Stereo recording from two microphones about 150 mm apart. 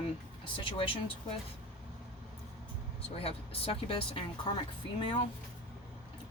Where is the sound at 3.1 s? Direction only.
40° left (ahead or behind).